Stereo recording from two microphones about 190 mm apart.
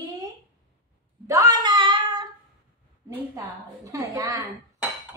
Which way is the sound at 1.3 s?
20° right (ahead or behind).